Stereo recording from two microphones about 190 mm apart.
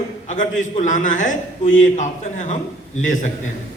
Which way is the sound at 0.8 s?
40° left (ahead or behind).